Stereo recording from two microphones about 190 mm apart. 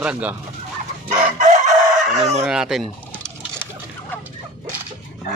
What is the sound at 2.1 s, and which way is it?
Speech, 35° right (ahead or behind).